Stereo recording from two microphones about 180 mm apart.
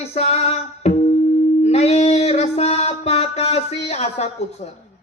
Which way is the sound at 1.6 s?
35° left (ahead or behind).